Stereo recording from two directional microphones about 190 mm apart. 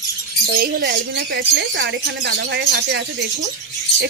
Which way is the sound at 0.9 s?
70° right (ahead or behind).